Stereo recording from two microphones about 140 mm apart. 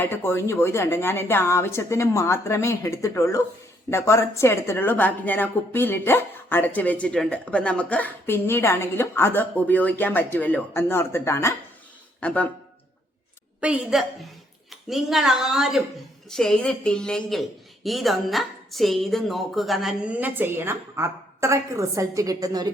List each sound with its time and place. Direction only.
0.0 s a woman's voice: 15° left (ahead or behind)
13.6 s a woman's voice: 5° right (ahead or behind); by 22.7 s 25° right (ahead or behind)